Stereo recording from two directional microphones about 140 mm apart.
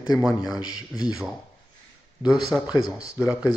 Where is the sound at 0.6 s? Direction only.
25° left (ahead or behind).